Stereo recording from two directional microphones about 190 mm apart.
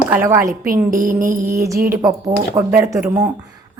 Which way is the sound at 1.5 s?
15° right (ahead or behind).